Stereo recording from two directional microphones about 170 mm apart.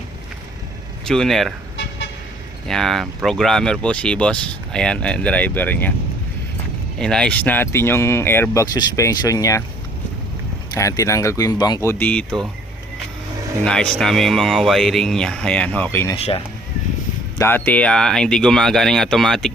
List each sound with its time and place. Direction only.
1.0 s speech: 5° left (ahead or behind)
2.6 s speech: centre (ahead or behind)
7.0 s speech: 5° left (ahead or behind); by 9.6 s 20° left (ahead or behind)
10.8 s speech: 20° left (ahead or behind)
13.7 s speech: 5° left (ahead or behind)
16.1 s speech: 35° left (ahead or behind)
17.3 s speech: 15° left (ahead or behind)